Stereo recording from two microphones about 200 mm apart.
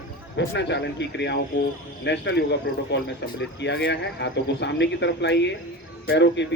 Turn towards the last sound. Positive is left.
turn(degrees=60)  # may be behind; listen again after turning